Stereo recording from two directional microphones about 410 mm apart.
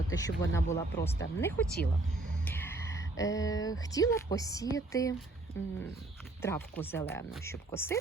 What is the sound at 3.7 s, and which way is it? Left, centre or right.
Speech, centre.